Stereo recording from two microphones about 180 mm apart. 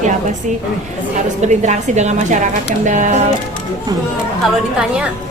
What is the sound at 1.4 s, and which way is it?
A woman's voice, 40° right (ahead or behind).